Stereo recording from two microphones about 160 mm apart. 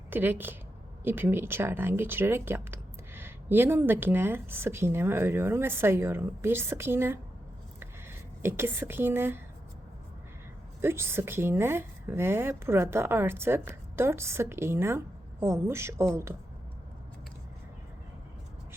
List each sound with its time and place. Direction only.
0.1 s speech: 15° right (ahead or behind)
7.8 s a sound: 15° right (ahead or behind)
10.8 s speech: 15° right (ahead or behind)